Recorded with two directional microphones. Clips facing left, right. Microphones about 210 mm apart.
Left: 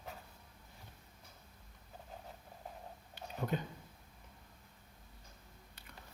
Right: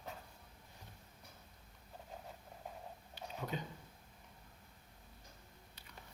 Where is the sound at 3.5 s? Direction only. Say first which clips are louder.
Left 5 dB; 55° left (ahead or behind).